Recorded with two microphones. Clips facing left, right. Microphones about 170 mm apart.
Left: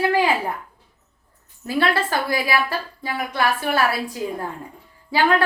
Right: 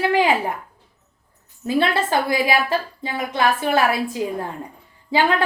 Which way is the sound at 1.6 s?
20° right (ahead or behind).